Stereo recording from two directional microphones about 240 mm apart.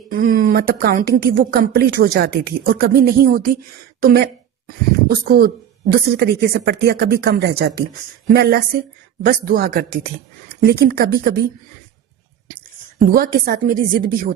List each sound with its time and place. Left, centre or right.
0.1 s speech: right
13.1 s speech: right